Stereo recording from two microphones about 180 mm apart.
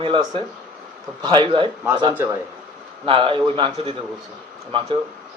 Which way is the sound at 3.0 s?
30° right (ahead or behind).